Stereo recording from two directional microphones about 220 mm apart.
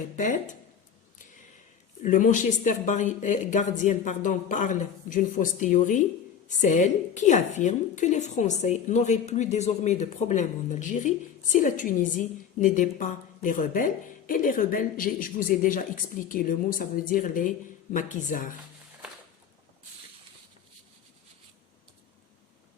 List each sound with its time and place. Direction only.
2.0 s a woman's voice: 35° left (ahead or behind)